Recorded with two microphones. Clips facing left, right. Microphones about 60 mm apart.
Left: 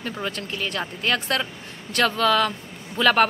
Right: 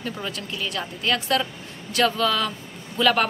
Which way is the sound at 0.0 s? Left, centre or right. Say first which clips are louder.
Left 1 dB; left.